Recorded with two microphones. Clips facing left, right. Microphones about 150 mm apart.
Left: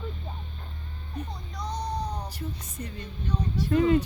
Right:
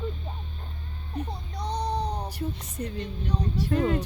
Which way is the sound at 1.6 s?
30° right (ahead or behind).